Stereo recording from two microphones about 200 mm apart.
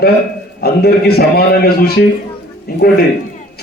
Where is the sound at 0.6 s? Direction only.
50° left (ahead or behind).